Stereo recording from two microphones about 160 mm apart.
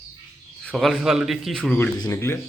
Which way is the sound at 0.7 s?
Centre (ahead or behind).